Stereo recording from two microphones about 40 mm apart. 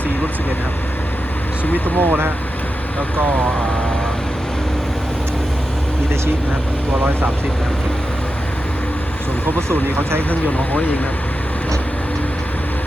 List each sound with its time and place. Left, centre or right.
2.0 s speech: right